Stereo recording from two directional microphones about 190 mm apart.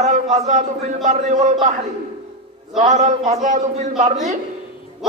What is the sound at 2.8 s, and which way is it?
A man's voice, 40° right (ahead or behind).